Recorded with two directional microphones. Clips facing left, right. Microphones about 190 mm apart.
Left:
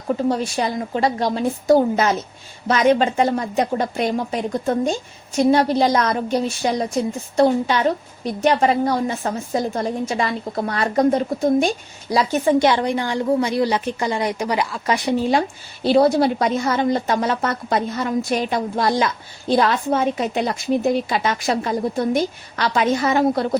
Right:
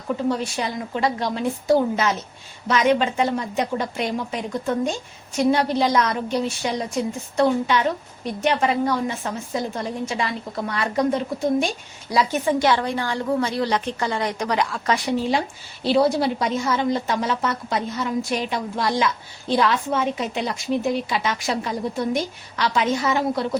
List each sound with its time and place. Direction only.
0.1 s a woman's voice: 40° left (ahead or behind)
12.5 s a woman's voice: 20° left (ahead or behind)
15.3 s a woman's voice: 50° left (ahead or behind)